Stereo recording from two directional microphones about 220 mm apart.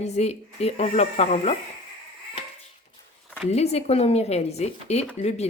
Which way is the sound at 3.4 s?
30° left (ahead or behind).